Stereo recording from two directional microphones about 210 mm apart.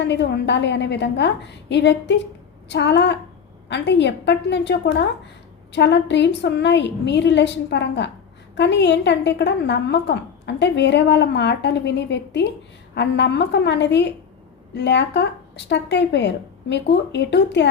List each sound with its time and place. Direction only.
0.0 s a woman's voice: 55° left (ahead or behind)